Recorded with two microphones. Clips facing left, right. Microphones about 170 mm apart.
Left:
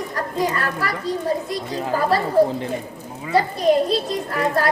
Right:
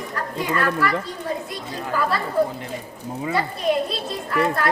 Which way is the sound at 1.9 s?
35° left (ahead or behind).